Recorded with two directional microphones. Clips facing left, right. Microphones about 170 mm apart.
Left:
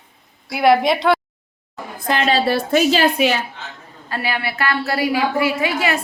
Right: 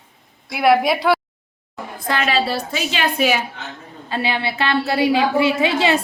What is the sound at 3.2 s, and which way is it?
Speech, 10° right (ahead or behind).